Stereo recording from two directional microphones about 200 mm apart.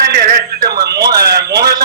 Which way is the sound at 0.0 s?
50° right (ahead or behind).